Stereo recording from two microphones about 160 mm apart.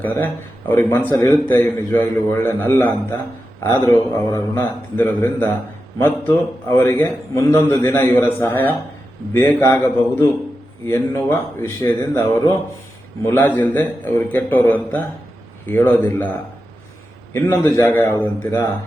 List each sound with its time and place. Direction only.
0.0 s a man's voice: 10° left (ahead or behind)
13.2 s a man's voice: 15° left (ahead or behind)
17.3 s a man's voice: 15° left (ahead or behind)